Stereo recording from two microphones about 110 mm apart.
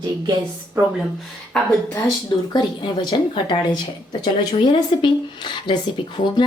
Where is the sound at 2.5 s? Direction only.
40° left (ahead or behind).